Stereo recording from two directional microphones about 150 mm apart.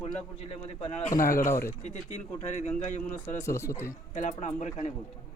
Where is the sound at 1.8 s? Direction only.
50° left (ahead or behind).